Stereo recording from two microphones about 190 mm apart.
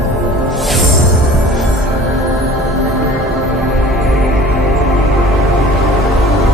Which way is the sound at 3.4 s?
Centre (ahead or behind).